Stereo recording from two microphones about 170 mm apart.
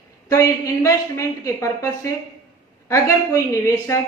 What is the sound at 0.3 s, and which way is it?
A man's voice, 20° left (ahead or behind).